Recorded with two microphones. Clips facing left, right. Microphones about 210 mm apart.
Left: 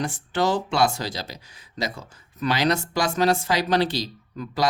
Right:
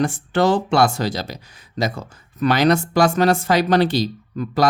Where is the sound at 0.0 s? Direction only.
55° right (ahead or behind).